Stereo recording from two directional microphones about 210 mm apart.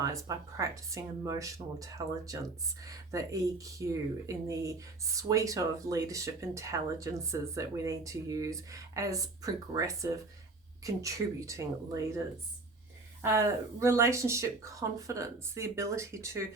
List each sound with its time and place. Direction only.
0.0 s speech: 15° right (ahead or behind)
13.2 s speech: 15° right (ahead or behind)